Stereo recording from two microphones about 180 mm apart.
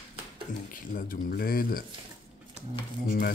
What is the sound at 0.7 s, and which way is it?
Speech, 50° left (ahead or behind).